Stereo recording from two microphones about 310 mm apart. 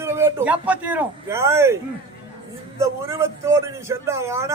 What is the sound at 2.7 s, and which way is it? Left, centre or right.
A man's voice, centre.